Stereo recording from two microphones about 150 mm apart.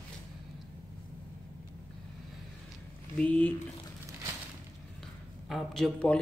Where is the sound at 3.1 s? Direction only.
10° left (ahead or behind).